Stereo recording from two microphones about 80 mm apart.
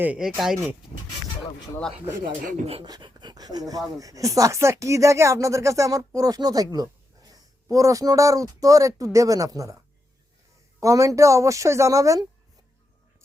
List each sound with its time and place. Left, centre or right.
0.2 s speech: centre
2.8 s speech: right